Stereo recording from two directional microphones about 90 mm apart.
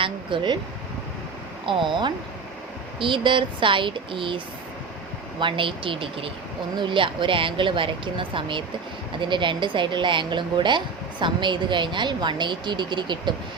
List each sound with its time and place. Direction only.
0.0 s speech: 65° right (ahead or behind)
1.6 s speech: 65° right (ahead or behind)
5.4 s speech: 70° right (ahead or behind)